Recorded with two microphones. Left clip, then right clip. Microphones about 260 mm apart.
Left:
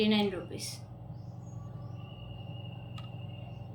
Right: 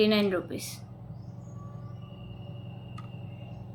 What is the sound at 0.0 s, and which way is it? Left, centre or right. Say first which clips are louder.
Speech: right 5 dB; centre.